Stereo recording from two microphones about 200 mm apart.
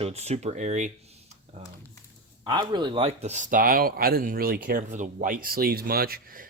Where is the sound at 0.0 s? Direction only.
30° right (ahead or behind).